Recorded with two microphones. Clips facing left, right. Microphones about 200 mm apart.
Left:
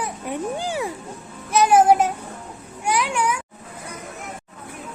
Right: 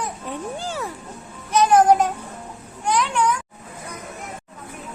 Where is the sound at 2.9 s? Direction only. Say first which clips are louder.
Right 1 dB; 10° left (ahead or behind).